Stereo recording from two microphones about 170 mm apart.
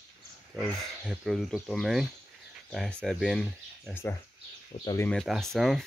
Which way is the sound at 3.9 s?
15° left (ahead or behind).